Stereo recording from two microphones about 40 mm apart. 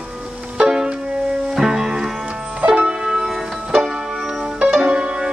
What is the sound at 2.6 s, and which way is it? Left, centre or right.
Music, right.